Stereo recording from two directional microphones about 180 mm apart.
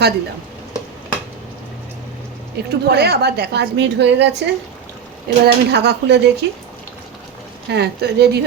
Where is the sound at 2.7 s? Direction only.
65° right (ahead or behind).